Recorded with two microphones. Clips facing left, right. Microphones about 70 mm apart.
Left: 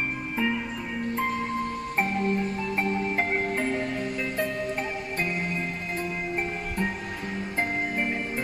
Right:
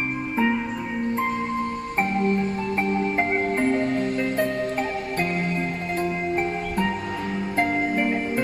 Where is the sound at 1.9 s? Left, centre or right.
Centre.